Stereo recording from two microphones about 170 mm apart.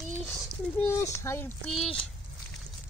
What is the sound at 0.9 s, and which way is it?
Speech, 15° left (ahead or behind).